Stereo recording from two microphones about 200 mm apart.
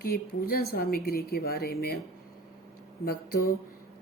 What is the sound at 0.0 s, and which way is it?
A woman's voice, 50° left (ahead or behind).